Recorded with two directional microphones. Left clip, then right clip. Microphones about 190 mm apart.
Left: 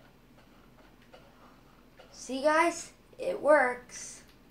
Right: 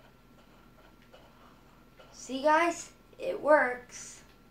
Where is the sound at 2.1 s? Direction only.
25° left (ahead or behind).